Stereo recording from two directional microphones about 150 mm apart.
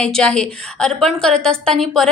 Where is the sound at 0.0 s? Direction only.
5° left (ahead or behind).